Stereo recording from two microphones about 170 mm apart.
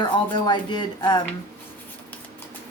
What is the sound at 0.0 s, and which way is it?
A woman's voice, 25° left (ahead or behind).